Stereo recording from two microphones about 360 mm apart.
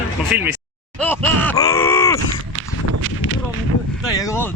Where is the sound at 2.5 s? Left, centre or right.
Right.